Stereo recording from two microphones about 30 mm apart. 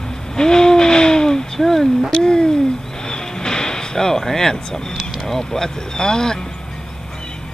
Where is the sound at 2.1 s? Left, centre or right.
Left.